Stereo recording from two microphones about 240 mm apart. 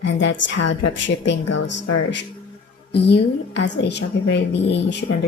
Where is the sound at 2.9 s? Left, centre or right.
Left.